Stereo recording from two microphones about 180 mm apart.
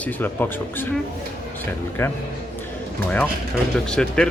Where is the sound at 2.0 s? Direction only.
10° left (ahead or behind).